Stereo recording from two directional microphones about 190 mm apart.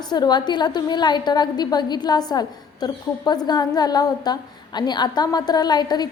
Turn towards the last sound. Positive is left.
turn(degrees=20)  # may be behind; listen again after turning